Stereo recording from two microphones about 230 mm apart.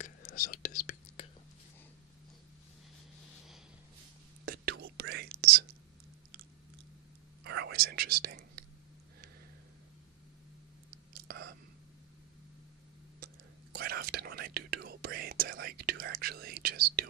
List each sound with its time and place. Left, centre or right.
0.0 s whispering: left
4.5 s whispering: right
7.4 s whispering: right
11.1 s whispering: right
13.7 s whispering: right